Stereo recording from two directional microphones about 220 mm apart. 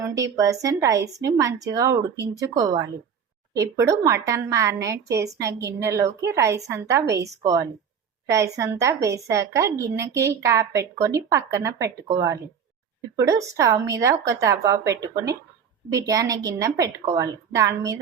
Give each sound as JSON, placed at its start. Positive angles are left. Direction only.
{"t": 0.0, "sound": "a woman's voice", "side_deg": -15}